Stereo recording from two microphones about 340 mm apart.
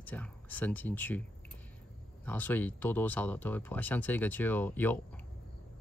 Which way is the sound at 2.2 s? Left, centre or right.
Centre.